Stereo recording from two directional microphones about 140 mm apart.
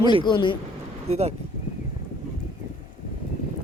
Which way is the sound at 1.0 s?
50° right (ahead or behind).